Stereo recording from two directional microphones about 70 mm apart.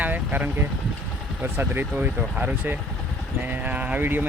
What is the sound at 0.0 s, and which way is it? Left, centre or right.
Speech, right.